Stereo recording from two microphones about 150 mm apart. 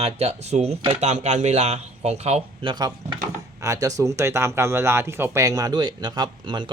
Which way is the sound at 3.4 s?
20° right (ahead or behind).